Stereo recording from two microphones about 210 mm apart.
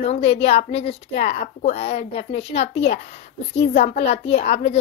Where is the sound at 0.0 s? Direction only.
30° left (ahead or behind).